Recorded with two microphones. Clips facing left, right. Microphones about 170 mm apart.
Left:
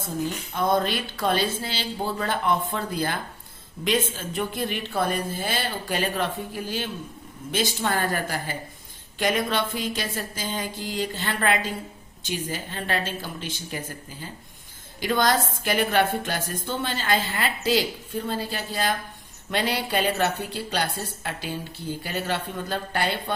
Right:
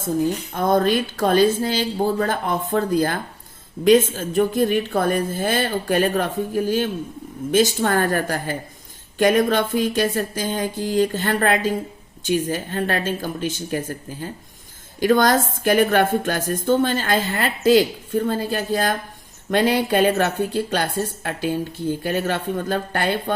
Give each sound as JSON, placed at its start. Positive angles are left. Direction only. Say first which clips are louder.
{"t": 0.5, "sound": "a woman's voice", "louder": "right 4 dB", "side_deg": -50}